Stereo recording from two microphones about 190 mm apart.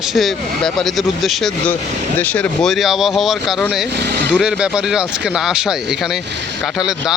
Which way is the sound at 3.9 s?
55° right (ahead or behind).